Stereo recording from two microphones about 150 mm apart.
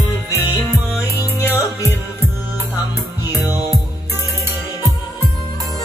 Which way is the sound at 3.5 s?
15° right (ahead or behind).